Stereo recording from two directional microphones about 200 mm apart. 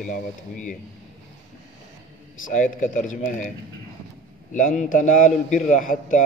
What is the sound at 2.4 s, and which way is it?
Speech, 40° left (ahead or behind).